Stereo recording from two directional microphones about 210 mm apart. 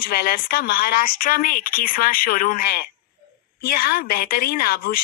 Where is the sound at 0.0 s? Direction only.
45° left (ahead or behind).